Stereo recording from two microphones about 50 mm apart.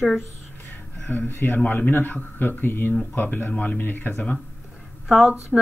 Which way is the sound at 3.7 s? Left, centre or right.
Left.